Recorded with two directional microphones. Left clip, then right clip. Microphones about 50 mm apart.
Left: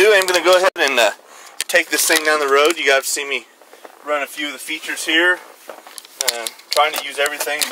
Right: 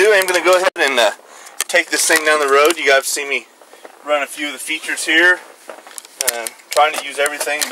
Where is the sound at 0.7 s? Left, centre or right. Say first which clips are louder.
Right 1 dB; left.